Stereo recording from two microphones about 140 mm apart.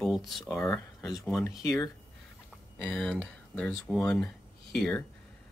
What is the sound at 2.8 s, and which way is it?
A man's voice, 10° left (ahead or behind).